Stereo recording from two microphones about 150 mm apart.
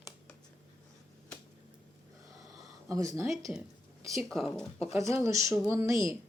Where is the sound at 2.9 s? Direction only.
20° right (ahead or behind).